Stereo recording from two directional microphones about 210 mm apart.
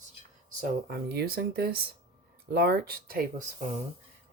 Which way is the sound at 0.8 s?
50° right (ahead or behind).